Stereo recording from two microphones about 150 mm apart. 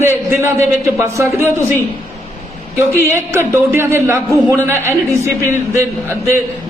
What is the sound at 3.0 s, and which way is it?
Speech, 15° right (ahead or behind).